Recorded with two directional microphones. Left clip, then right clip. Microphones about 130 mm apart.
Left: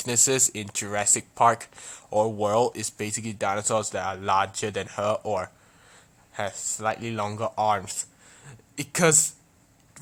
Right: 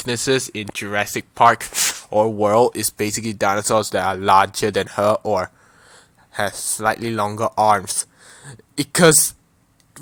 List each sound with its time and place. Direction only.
0.0 s speech: 20° right (ahead or behind); by 5.1 s 45° right (ahead or behind)
5.1 s speech: 30° right (ahead or behind)